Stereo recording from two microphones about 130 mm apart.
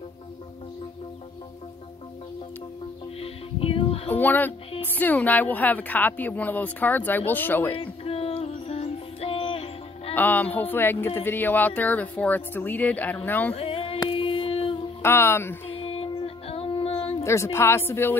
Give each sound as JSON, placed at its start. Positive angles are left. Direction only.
{"t": 3.2, "sound": "music", "side_deg": 45}
{"t": 4.1, "sound": "speech", "side_deg": 15}
{"t": 7.7, "sound": "music", "side_deg": 45}
{"t": 10.1, "sound": "speech", "side_deg": 15}
{"t": 13.6, "sound": "music", "side_deg": 45}
{"t": 15.0, "sound": "speech", "side_deg": 20}
{"t": 15.8, "sound": "a sound", "side_deg": 45}
{"t": 17.2, "sound": "speech", "side_deg": 20}